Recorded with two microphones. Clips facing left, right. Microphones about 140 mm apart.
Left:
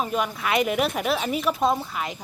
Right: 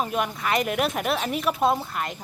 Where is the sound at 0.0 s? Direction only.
Centre (ahead or behind).